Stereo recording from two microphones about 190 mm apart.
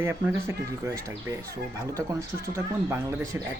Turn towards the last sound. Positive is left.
turn(degrees=-15)  # may be behind; listen again after turning